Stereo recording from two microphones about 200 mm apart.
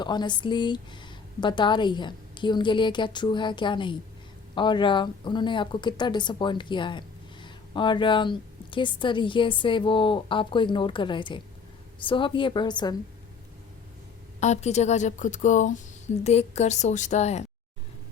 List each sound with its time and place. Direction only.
0.0 s speech: 20° left (ahead or behind)
14.4 s a woman's voice: 35° left (ahead or behind)